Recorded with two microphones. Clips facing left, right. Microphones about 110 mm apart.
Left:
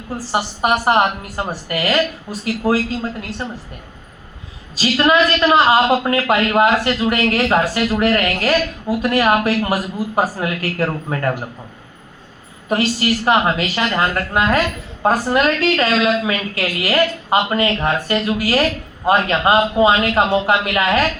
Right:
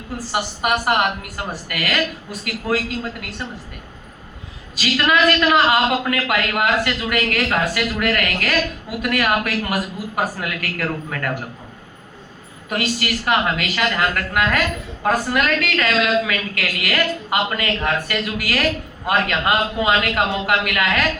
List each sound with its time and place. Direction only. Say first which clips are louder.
0.3 s a woman's voice: left 3 dB; 30° left (ahead or behind)
4.7 s a woman's voice: left 4 dB; 30° left (ahead or behind)
12.6 s a man's voice: left 5 dB; 30° left (ahead or behind)